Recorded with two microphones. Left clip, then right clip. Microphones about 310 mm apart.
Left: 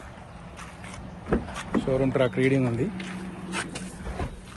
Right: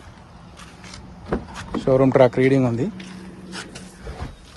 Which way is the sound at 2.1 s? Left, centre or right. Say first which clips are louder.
Right 8 dB; centre.